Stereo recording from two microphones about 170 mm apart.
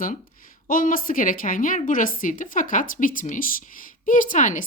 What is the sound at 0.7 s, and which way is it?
A woman's voice, 55° left (ahead or behind).